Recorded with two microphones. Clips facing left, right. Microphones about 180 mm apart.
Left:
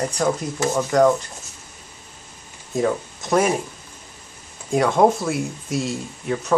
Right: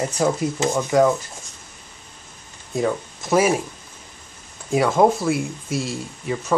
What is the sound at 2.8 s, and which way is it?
Speech, centre (ahead or behind).